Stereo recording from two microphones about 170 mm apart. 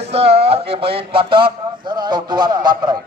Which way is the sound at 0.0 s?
35° right (ahead or behind).